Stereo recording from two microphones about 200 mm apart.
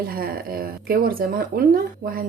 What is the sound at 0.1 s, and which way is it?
Speech, 50° right (ahead or behind).